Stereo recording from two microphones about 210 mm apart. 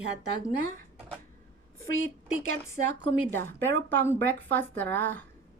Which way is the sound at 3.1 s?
10° left (ahead or behind).